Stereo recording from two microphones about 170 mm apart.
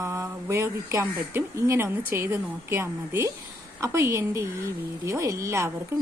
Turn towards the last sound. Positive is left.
turn(degrees=-15)  # may be behind; listen again after turning